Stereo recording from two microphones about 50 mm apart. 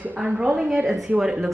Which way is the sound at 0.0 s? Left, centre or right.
Right.